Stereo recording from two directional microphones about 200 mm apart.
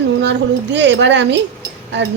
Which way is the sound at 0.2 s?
60° right (ahead or behind).